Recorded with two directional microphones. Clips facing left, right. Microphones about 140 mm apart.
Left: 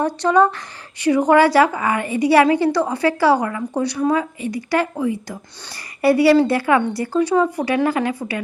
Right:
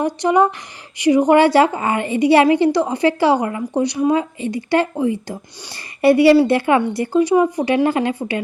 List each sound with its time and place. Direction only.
0.0 s a woman's voice: 15° right (ahead or behind)